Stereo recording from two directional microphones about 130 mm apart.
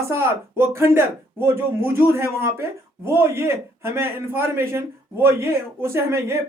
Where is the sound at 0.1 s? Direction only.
20° right (ahead or behind).